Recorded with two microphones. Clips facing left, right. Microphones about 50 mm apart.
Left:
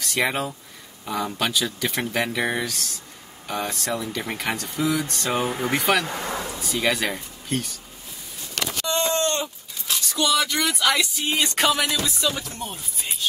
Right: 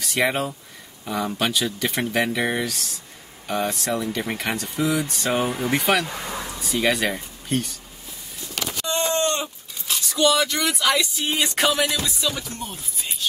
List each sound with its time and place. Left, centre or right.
0.0 s speech: centre
8.8 s groan: right
9.8 s speech: centre